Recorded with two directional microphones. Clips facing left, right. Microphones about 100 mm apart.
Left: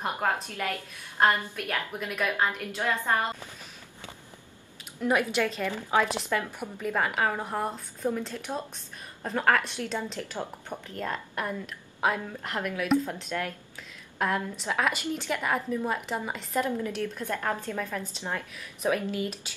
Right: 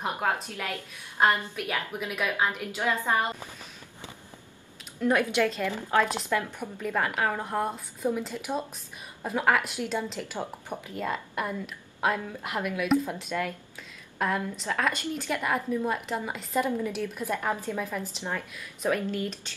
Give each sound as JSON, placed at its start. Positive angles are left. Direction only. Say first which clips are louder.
{"t": 0.2, "sound": "speech", "louder": "left 2 dB", "side_deg": -5}
{"t": 5.0, "sound": "speech", "louder": "right 2 dB", "side_deg": 5}